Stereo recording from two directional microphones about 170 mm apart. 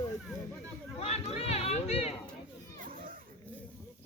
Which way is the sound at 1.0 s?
35° left (ahead or behind).